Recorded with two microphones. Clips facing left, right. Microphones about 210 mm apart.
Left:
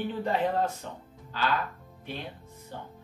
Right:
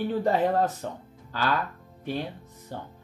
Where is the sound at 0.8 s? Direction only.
50° right (ahead or behind).